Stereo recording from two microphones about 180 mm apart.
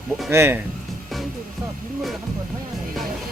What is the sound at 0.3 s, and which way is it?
Speech, 15° right (ahead or behind).